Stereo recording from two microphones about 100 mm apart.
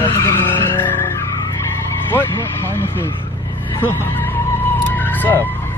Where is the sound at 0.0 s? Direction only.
20° left (ahead or behind).